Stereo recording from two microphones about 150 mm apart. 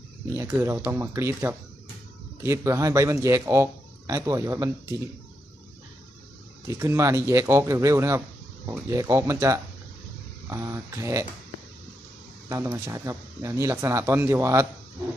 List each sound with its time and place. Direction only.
0.3 s speech: 20° right (ahead or behind)
6.7 s speech: 20° right (ahead or behind)
12.5 s speech: 20° right (ahead or behind)